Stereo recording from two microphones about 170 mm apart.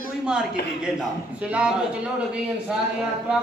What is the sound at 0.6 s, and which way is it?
Speech, 70° left (ahead or behind).